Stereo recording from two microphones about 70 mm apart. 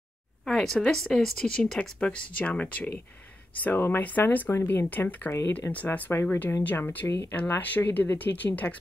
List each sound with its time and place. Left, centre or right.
0.5 s speech: centre; by 8.7 s left